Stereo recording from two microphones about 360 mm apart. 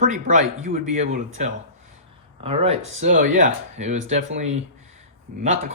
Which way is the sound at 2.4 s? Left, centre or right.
Centre.